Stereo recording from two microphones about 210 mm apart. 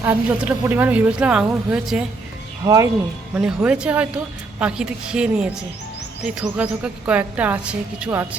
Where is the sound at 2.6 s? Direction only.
15° right (ahead or behind).